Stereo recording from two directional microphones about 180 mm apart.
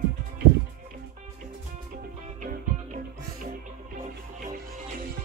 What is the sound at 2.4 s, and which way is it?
Music, 50° right (ahead or behind).